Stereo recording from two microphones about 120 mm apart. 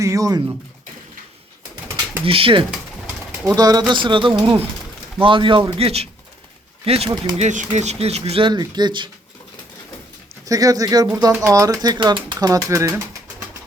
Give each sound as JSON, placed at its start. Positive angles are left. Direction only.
{"t": 0.0, "sound": "speech", "side_deg": -30}
{"t": 2.2, "sound": "a man's voice", "side_deg": -50}
{"t": 3.4, "sound": "a man's voice", "side_deg": -30}
{"t": 7.3, "sound": "speech", "side_deg": -80}
{"t": 10.4, "sound": "speech", "side_deg": -30}